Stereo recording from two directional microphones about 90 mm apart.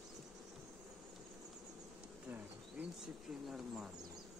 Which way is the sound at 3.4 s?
5° right (ahead or behind).